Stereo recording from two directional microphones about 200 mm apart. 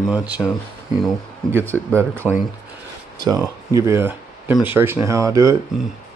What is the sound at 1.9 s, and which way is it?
Speech, 10° right (ahead or behind).